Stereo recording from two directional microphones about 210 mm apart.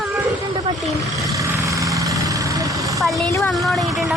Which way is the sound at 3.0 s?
Centre (ahead or behind).